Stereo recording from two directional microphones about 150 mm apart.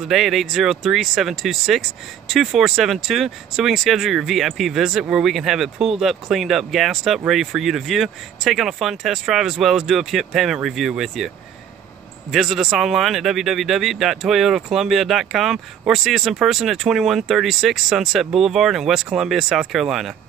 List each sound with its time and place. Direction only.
0.0 s speech: centre (ahead or behind)